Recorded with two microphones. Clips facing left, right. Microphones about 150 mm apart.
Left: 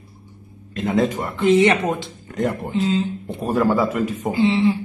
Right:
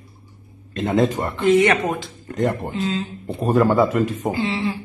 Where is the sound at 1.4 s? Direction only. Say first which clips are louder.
Left 1 dB; 20° left (ahead or behind).